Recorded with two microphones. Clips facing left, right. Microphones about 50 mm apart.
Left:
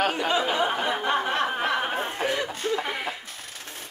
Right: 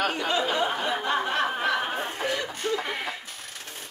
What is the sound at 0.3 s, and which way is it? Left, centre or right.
Snicker, centre.